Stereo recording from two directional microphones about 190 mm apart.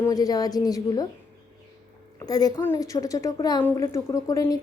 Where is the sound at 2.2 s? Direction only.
20° left (ahead or behind).